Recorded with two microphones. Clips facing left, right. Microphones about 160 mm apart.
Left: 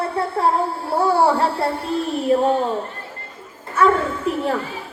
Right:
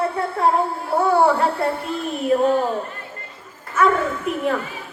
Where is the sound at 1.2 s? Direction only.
30° left (ahead or behind).